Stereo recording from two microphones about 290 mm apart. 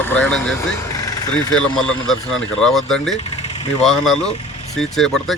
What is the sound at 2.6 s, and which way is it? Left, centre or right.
Speech, centre.